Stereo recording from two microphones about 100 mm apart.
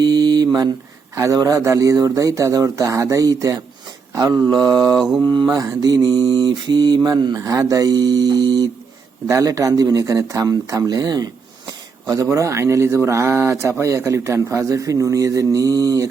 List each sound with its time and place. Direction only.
0.0 s mantra: 45° right (ahead or behind)
1.1 s speech: 35° right (ahead or behind)
4.9 s mantra: 5° right (ahead or behind)
5.2 s mantra: 45° right (ahead or behind)
5.5 s speech: 35° right (ahead or behind)
7.3 s speech: 30° right (ahead or behind)